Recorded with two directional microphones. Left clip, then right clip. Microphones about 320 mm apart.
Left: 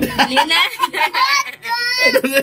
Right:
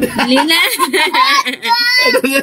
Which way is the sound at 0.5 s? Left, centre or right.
Right.